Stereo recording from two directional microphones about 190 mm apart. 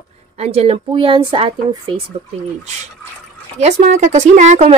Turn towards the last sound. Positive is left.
turn(degrees=-35)  # may be behind; listen again after turning